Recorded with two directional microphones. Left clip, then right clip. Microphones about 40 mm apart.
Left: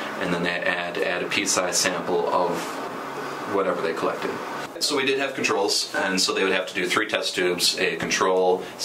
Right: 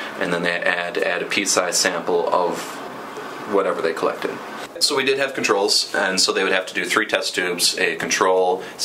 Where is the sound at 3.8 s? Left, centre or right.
Right.